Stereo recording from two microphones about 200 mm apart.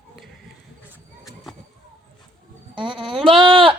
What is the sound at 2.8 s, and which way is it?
Speech, 25° right (ahead or behind).